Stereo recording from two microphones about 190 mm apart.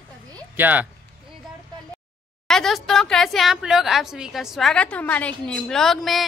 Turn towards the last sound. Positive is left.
turn(degrees=0)  # may be behind; listen again after turning